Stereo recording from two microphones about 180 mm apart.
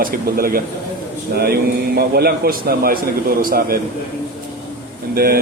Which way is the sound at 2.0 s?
60° right (ahead or behind).